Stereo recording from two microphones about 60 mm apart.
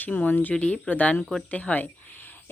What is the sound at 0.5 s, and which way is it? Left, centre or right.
Speech, centre.